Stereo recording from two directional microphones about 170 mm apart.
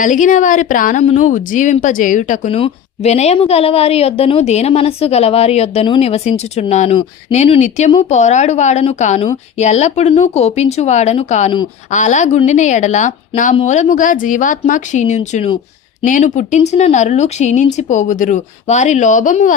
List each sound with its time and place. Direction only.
0.0 s a woman's voice: 50° left (ahead or behind)
2.5 s a woman's voice: 35° left (ahead or behind)